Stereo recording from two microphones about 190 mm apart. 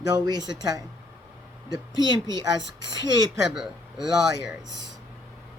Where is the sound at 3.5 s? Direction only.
Centre (ahead or behind).